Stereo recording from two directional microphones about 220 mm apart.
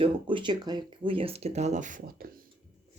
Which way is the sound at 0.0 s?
20° right (ahead or behind).